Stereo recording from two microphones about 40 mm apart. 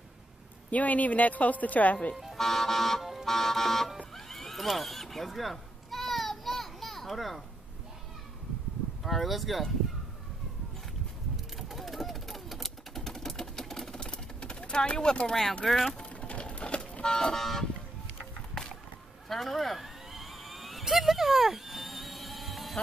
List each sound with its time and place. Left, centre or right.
0.7 s speech: left
2.3 s speech: centre
3.0 s a sound: centre
3.3 s speech: centre
4.1 s neigh: centre
9.0 s speech: centre
11.5 s typewriter: centre; by 15.3 s left
15.6 s speech: centre
16.0 s toot: left; by 17.6 s centre
19.2 s a sound: centre
20.8 s music: centre